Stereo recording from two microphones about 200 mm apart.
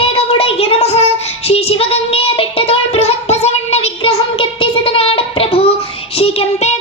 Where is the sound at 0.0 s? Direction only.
30° left (ahead or behind).